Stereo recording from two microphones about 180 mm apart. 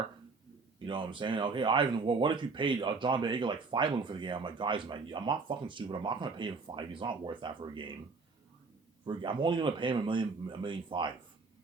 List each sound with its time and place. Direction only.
0.9 s speech: 25° right (ahead or behind)
9.0 s speech: 25° right (ahead or behind)